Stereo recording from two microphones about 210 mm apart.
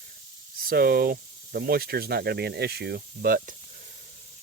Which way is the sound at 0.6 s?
45° right (ahead or behind).